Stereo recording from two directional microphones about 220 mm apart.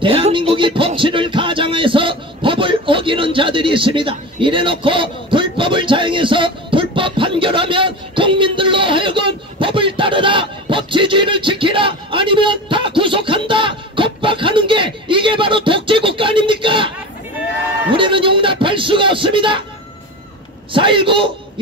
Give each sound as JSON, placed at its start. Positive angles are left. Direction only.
{"t": 0.0, "sound": "music", "side_deg": -25}
{"t": 17.9, "sound": "music", "side_deg": -25}
{"t": 20.7, "sound": "a man's voice", "side_deg": -25}